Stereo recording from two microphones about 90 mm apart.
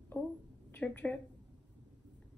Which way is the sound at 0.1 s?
15° left (ahead or behind).